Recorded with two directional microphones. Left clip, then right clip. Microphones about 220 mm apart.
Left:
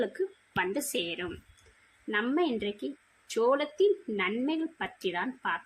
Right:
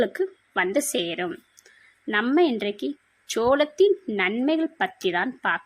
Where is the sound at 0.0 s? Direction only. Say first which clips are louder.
Right 7 dB; 40° right (ahead or behind).